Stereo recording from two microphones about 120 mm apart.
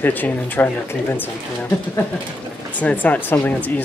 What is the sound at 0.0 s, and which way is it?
Speech, 15° left (ahead or behind).